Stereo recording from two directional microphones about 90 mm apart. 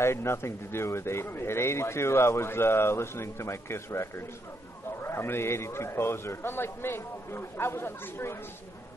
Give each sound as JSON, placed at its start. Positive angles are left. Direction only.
{"t": 0.0, "sound": "speech", "side_deg": 30}